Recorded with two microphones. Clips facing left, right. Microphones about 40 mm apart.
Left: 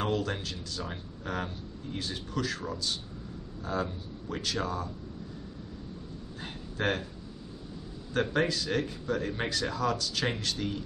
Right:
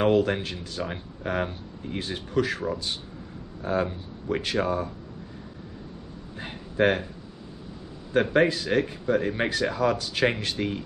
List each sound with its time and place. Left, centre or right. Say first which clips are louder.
0.0 s speech: right 9 dB; right
6.4 s speech: right 9 dB; right
8.1 s speech: right 7 dB; right